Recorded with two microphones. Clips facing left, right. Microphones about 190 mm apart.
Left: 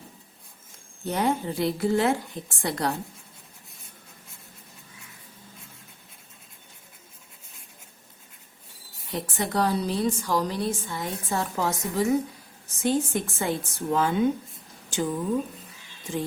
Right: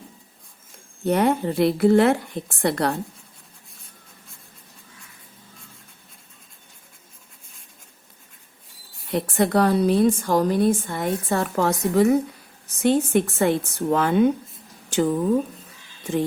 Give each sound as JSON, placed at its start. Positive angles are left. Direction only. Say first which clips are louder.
{"t": 1.0, "sound": "a woman's voice", "louder": "right 6 dB", "side_deg": -60}
{"t": 9.1, "sound": "a woman's voice", "louder": "right 7 dB", "side_deg": -60}
{"t": 14.8, "sound": "a sound", "louder": "right 7 dB", "side_deg": -65}